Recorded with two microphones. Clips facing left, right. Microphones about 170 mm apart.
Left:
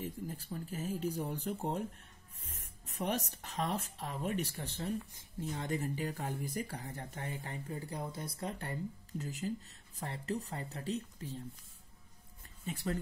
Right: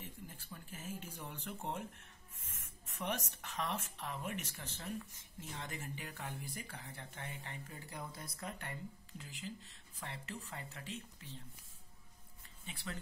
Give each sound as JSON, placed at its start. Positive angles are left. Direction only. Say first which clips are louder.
{"t": 0.0, "sound": "speech", "louder": "left 10 dB", "side_deg": 40}
{"t": 9.2, "sound": "speech", "louder": "left 9 dB", "side_deg": 45}
{"t": 12.6, "sound": "speech", "louder": "left 10 dB", "side_deg": 40}